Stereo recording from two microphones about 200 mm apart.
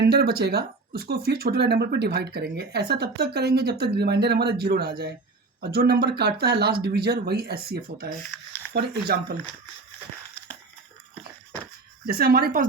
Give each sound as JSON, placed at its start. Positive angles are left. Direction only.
{"t": 0.0, "sound": "speech", "side_deg": -55}
{"t": 12.0, "sound": "speech", "side_deg": -50}